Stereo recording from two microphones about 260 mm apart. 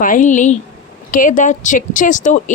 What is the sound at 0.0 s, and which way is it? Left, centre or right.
Speech, left.